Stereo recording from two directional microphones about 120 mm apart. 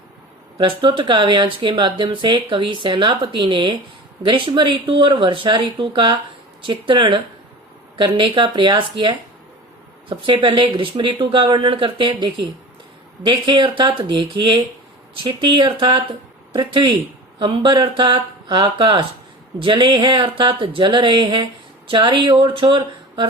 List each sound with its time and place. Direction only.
0.6 s speech: 40° right (ahead or behind)